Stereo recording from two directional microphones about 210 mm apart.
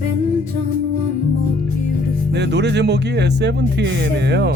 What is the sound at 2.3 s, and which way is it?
Speech, 55° right (ahead or behind).